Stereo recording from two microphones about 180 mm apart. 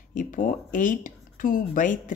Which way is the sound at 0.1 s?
45° left (ahead or behind).